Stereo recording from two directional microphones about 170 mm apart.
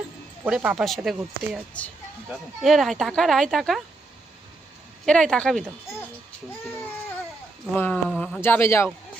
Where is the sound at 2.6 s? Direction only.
Centre (ahead or behind).